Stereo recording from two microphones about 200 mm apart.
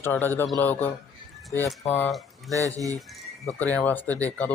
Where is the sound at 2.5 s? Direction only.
15° right (ahead or behind).